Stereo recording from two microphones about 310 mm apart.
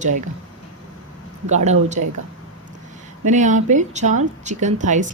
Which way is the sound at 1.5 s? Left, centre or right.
Right.